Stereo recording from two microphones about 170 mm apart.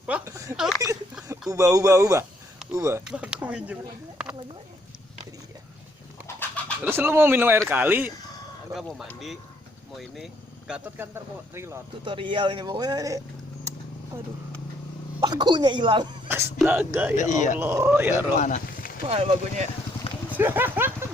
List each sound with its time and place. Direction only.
0.1 s a sound: 15° right (ahead or behind)
0.5 s a sound: centre (ahead or behind)
1.3 s speech: 20° right (ahead or behind)
3.1 s speech: 5° right (ahead or behind)
6.2 s bird: 10° left (ahead or behind)
6.8 s speech: 15° right (ahead or behind)
12.0 s a man's voice: 30° right (ahead or behind)
15.2 s a man's voice: 25° right (ahead or behind)
16.6 s speech: 10° right (ahead or behind)
17.2 s a man's voice: 45° left (ahead or behind)
17.6 s speech: 15° right (ahead or behind)
18.3 s a sound: 45° left (ahead or behind)
19.0 s speech: 35° right (ahead or behind)
20.3 s speech: 10° right (ahead or behind)